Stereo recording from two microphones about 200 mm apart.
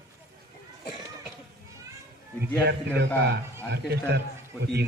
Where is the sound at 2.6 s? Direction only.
55° right (ahead or behind).